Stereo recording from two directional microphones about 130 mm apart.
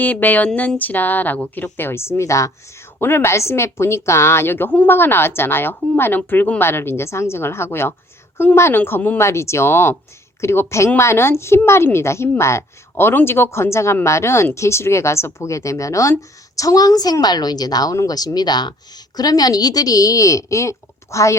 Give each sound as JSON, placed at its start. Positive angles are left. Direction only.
{"t": 0.0, "sound": "a woman's voice", "side_deg": 15}